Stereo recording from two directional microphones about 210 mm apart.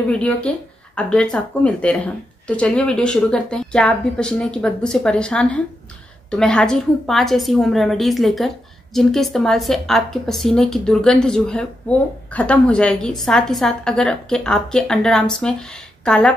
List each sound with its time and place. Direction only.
0.1 s speech: 5° left (ahead or behind)